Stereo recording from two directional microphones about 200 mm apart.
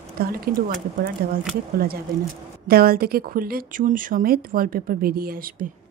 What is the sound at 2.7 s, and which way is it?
Speech, 50° right (ahead or behind).